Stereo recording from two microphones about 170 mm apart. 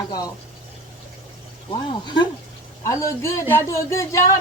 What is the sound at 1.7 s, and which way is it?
A woman's voice, 25° left (ahead or behind).